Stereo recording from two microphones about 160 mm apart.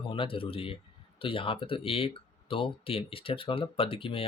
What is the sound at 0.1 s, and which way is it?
Speech, 35° left (ahead or behind).